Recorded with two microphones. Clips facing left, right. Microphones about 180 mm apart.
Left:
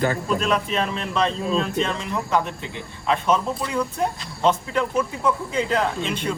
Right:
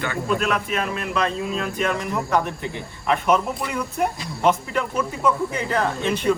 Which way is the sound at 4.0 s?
15° right (ahead or behind).